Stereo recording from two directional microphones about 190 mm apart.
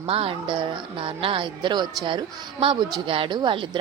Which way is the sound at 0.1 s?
30° right (ahead or behind).